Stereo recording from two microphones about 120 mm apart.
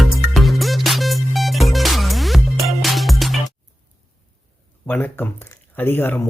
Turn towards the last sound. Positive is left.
turn(degrees=20)  # may be behind; listen again after turning